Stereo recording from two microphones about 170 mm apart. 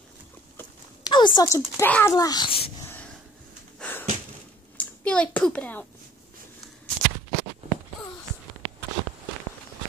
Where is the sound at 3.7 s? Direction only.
10° left (ahead or behind).